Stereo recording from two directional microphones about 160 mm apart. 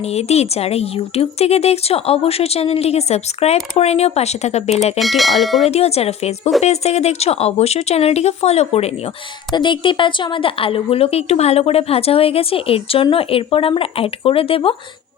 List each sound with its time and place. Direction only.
0.1 s speech: 40° left (ahead or behind)
4.9 s speech: centre (ahead or behind)
5.6 s speech: 40° left (ahead or behind)
9.5 s speech: 30° left (ahead or behind)